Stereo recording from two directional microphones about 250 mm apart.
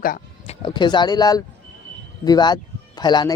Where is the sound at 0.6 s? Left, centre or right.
Centre.